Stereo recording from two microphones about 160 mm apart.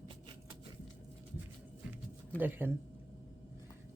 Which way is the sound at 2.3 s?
10° right (ahead or behind).